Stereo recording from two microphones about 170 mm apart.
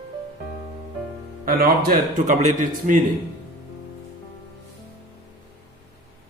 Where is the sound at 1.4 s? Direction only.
60° right (ahead or behind).